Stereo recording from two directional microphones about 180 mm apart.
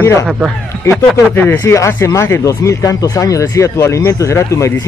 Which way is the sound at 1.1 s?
10° left (ahead or behind).